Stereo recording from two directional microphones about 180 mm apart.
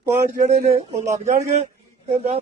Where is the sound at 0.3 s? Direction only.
40° right (ahead or behind).